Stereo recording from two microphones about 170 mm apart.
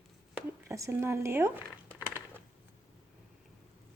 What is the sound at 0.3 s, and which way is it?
Crumpling, 15° right (ahead or behind).